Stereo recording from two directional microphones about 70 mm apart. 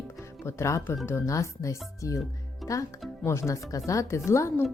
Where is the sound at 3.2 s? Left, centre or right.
Left.